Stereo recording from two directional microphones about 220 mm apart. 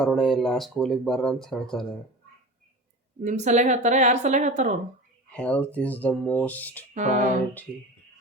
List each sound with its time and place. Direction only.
0.0 s speech: centre (ahead or behind)
3.2 s a woman's voice: 30° right (ahead or behind)
5.3 s speech: 5° left (ahead or behind)
6.9 s a woman's voice: 35° right (ahead or behind)